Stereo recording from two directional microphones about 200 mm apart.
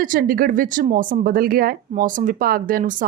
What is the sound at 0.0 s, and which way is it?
Speech, 45° right (ahead or behind).